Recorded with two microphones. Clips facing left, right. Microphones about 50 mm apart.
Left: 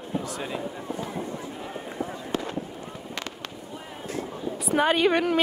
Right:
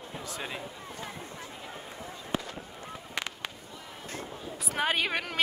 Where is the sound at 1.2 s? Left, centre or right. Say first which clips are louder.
Left 8 dB; left.